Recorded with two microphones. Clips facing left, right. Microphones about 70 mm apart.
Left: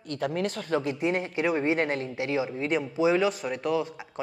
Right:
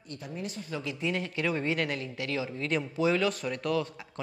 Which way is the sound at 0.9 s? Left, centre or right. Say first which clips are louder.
Left 5 dB; left.